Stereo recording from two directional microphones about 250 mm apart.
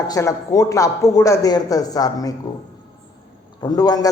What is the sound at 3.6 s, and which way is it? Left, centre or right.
Speech, centre.